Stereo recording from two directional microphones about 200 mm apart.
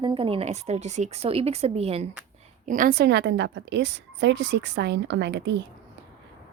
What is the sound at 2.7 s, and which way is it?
A woman's voice, 40° right (ahead or behind).